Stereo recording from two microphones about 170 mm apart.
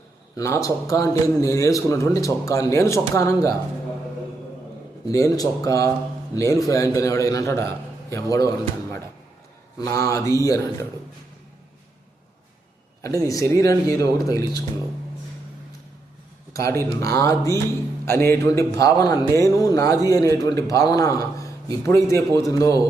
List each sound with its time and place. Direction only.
0.3 s speech: 20° left (ahead or behind)
5.0 s a man's voice: 20° left (ahead or behind)
13.2 s speech: 20° left (ahead or behind)
16.5 s speech: 20° left (ahead or behind)